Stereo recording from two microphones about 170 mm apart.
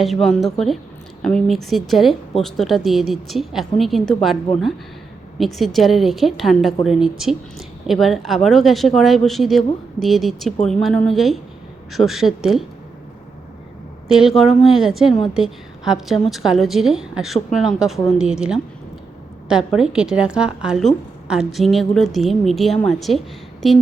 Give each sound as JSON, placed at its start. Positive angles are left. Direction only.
{"t": 0.0, "sound": "a woman's voice", "side_deg": 0}
{"t": 14.1, "sound": "a woman's voice", "side_deg": -5}